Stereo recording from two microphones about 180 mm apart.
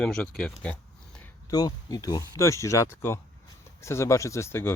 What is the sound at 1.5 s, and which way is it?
Speech, 20° left (ahead or behind).